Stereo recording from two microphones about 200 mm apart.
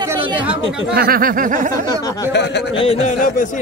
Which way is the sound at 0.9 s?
50° right (ahead or behind).